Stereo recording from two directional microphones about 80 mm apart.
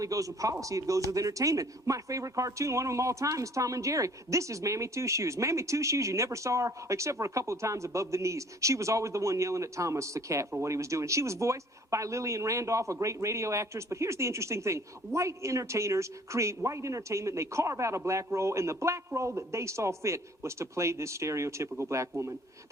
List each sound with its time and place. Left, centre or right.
0.0 s speech: right